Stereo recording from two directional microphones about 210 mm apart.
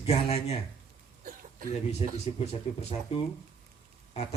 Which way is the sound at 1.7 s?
30° left (ahead or behind).